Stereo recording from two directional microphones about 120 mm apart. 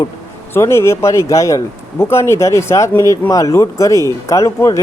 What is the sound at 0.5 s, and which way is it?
Speech, 20° left (ahead or behind).